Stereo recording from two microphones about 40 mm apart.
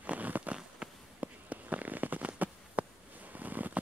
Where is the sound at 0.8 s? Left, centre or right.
Right.